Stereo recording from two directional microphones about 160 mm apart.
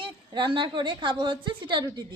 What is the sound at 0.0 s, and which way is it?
A woman's voice, 30° right (ahead or behind).